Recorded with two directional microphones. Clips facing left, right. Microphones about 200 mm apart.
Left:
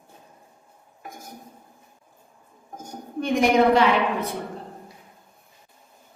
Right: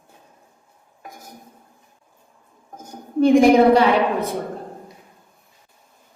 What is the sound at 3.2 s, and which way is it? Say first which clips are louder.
Speech: right 7 dB; 30° right (ahead or behind).